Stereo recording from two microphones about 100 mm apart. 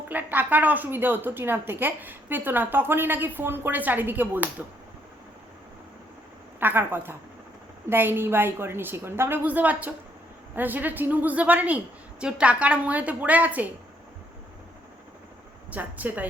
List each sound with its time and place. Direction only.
0.1 s a woman's voice: 20° right (ahead or behind)
6.6 s a woman's voice: 20° right (ahead or behind)
15.7 s a woman's voice: 15° right (ahead or behind)